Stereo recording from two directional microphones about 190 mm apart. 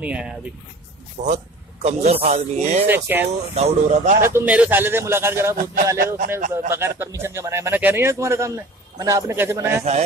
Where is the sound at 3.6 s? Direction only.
35° right (ahead or behind).